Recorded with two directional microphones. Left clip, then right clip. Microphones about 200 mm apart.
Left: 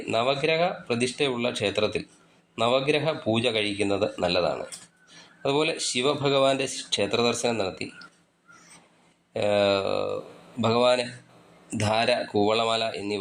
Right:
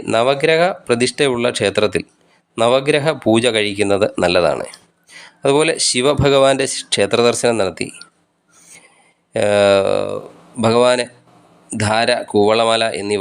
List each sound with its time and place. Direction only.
0.1 s speech: 30° right (ahead or behind)
9.3 s a man's voice: 30° right (ahead or behind)